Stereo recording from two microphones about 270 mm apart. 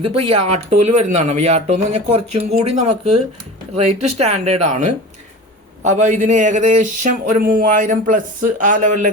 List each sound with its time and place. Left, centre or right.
0.0 s speech: right
3.8 s speech: right